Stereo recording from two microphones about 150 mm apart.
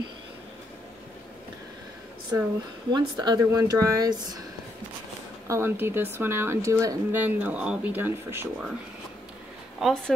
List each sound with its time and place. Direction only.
2.9 s speech: 30° right (ahead or behind)
5.5 s speech: 15° right (ahead or behind)
9.8 s speech: centre (ahead or behind)